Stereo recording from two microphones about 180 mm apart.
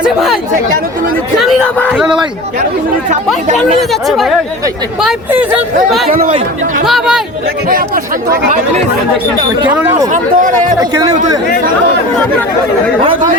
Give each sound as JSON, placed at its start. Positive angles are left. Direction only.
{"t": 0.0, "sound": "speech", "side_deg": 0}
{"t": 1.4, "sound": "a sound", "side_deg": 0}
{"t": 2.0, "sound": "speech", "side_deg": -5}
{"t": 3.6, "sound": "speech", "side_deg": 0}
{"t": 6.1, "sound": "speech", "side_deg": -40}
{"t": 6.8, "sound": "speech", "side_deg": 0}
{"t": 7.7, "sound": "speech", "side_deg": -55}
{"t": 9.6, "sound": "speech", "side_deg": -10}
{"t": 10.1, "sound": "speech", "side_deg": -45}